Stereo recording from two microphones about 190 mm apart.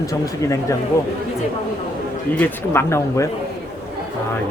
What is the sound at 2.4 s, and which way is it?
Speech, 15° left (ahead or behind).